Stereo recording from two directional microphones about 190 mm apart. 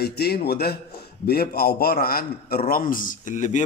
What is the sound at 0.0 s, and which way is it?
A man's voice, 55° left (ahead or behind).